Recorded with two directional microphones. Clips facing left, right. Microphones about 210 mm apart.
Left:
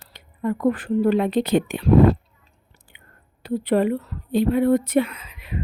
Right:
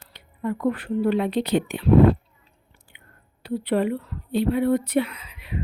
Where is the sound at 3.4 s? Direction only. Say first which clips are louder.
Left 3 dB; 45° left (ahead or behind).